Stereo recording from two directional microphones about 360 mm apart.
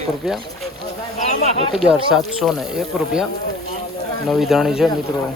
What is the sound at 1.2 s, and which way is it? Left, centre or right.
Speech, centre.